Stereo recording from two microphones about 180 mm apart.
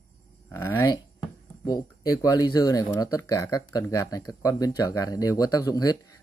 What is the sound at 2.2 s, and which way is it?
Speech, 20° left (ahead or behind).